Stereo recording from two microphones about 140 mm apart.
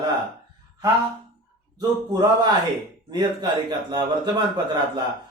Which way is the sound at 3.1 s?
30° right (ahead or behind).